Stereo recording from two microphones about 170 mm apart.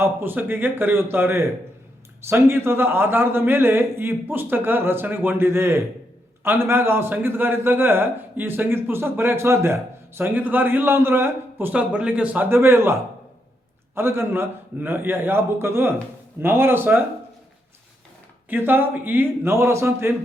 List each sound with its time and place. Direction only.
0.0 s a man's voice: 15° right (ahead or behind)
18.4 s a man's voice: 10° right (ahead or behind)